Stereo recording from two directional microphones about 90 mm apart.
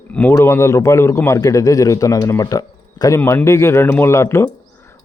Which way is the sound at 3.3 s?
30° left (ahead or behind).